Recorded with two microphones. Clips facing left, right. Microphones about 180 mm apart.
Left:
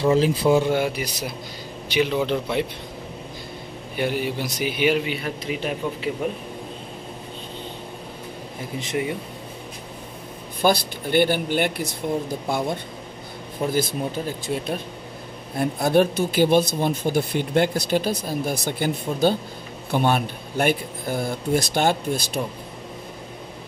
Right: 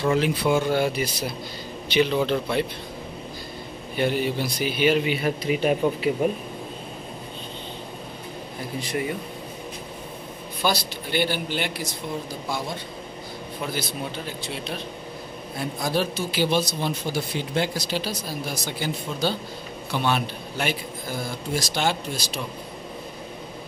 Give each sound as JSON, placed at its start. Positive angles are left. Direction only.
{"t": 0.1, "sound": "speech", "side_deg": 30}
{"t": 0.7, "sound": "speech", "side_deg": 15}
{"t": 3.9, "sound": "speech", "side_deg": 10}
{"t": 5.0, "sound": "a man's voice", "side_deg": -5}
{"t": 8.7, "sound": "speech", "side_deg": 20}
{"t": 10.6, "sound": "speech", "side_deg": 50}